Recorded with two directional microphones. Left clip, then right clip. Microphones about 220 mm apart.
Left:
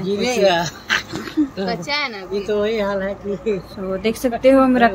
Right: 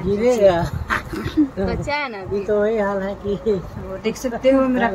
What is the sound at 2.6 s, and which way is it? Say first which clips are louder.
Speech: right 1 dB; 15° right (ahead or behind).